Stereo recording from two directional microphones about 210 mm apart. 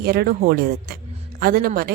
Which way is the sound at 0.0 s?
50° right (ahead or behind).